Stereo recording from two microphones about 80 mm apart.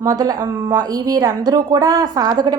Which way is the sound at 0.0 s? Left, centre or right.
Right.